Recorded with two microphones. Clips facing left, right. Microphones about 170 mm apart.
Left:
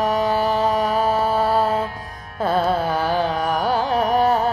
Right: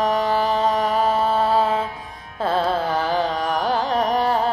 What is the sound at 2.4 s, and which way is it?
Music, 25° right (ahead or behind).